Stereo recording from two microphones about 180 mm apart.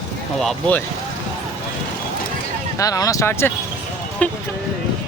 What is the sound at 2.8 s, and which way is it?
Speech, 20° left (ahead or behind).